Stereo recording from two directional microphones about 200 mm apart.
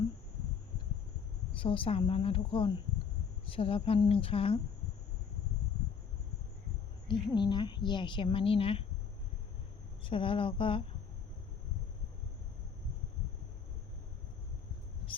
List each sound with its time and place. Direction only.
1.5 s a woman's voice: 25° left (ahead or behind)
7.1 s a woman's voice: 20° left (ahead or behind)
10.0 s a woman's voice: 25° left (ahead or behind)